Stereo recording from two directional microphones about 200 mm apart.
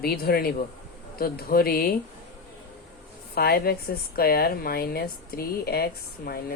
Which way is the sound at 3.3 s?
50° left (ahead or behind).